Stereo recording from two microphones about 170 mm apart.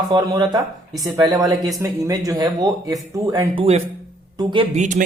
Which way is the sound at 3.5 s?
35° right (ahead or behind).